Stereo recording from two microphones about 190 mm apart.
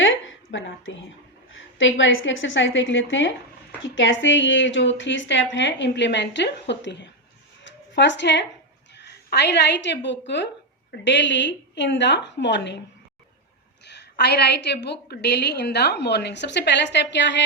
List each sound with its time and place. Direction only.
0.0 s a sound: 80° left
1.5 s speech: 85° left; by 7.1 s 65° left (ahead or behind)
7.6 s zipper: 70° left (ahead or behind)
8.9 s a woman's voice: 60° left (ahead or behind)
13.8 s a woman's voice: 60° left (ahead or behind)